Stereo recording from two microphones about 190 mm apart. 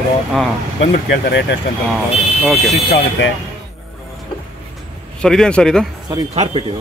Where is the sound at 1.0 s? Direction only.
60° left (ahead or behind).